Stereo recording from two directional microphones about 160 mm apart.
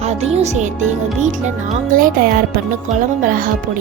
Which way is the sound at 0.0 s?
40° right (ahead or behind).